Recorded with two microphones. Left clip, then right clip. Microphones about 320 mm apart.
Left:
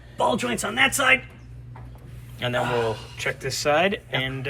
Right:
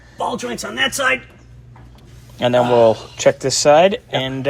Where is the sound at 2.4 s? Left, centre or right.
Centre.